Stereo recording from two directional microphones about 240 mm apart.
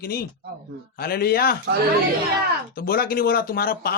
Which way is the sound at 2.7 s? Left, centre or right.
Left.